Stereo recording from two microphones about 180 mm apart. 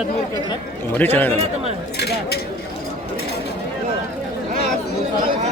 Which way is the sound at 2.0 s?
65° left (ahead or behind).